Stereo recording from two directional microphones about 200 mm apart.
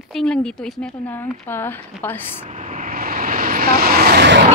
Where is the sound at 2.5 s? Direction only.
40° right (ahead or behind); by 4.4 s 60° right (ahead or behind).